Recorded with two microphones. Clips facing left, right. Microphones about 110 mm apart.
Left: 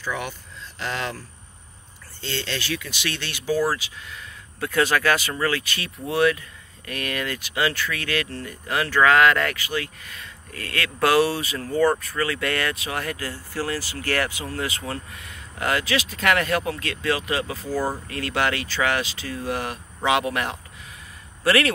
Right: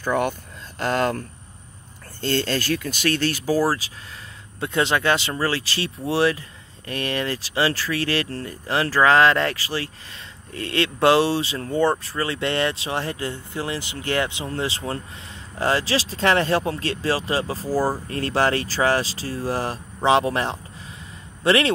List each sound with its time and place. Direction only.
0.0 s speech: 50° right (ahead or behind)
2.2 s speech: 45° right (ahead or behind)
4.6 s speech: 25° right (ahead or behind)